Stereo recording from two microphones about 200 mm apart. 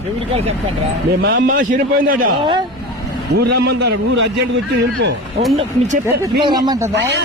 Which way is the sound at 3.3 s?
55° right (ahead or behind).